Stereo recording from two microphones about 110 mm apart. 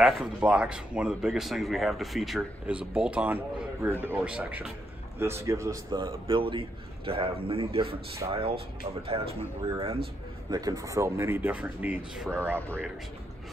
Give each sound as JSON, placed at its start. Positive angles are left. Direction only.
{"t": 0.0, "sound": "speech", "side_deg": -5}
{"t": 2.6, "sound": "speech", "side_deg": -10}
{"t": 5.2, "sound": "speech", "side_deg": -25}
{"t": 5.9, "sound": "a man's voice", "side_deg": -50}
{"t": 10.5, "sound": "speech", "side_deg": -35}
{"t": 12.4, "sound": "speech", "side_deg": -20}